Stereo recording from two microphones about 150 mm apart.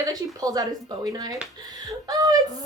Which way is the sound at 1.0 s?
25° right (ahead or behind).